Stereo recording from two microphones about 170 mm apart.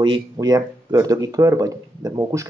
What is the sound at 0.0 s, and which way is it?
Speech, 25° right (ahead or behind).